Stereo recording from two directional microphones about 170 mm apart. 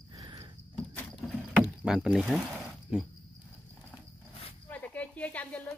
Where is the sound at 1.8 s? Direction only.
5° right (ahead or behind).